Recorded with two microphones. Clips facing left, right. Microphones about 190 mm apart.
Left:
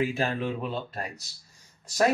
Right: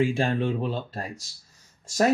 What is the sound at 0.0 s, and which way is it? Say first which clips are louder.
Speech: right 4 dB; 30° right (ahead or behind).